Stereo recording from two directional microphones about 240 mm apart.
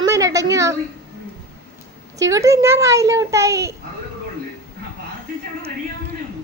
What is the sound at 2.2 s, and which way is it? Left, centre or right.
A child's voice, centre.